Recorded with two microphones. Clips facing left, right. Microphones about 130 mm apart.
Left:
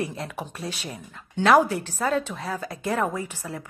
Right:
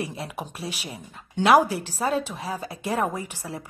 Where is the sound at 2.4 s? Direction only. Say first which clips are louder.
Left 1 dB; 25° right (ahead or behind).